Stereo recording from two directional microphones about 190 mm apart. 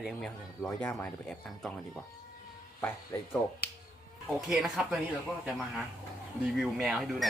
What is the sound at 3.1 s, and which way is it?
Speech, 10° left (ahead or behind).